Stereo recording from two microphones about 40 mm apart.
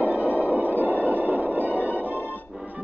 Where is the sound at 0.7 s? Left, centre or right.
Left.